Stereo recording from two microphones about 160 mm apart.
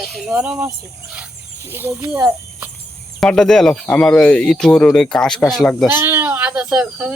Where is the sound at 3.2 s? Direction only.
5° left (ahead or behind).